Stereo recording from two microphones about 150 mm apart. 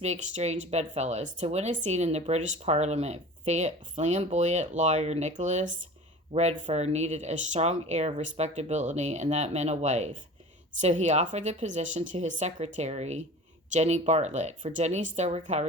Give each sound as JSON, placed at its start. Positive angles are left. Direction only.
{"t": 0.0, "sound": "speech", "side_deg": -50}